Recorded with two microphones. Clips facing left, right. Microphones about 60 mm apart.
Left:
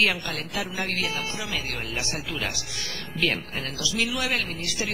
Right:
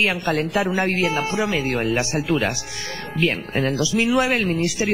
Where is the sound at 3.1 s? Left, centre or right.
Right.